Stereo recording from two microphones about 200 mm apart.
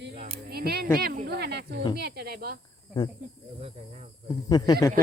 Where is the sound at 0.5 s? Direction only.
50° right (ahead or behind).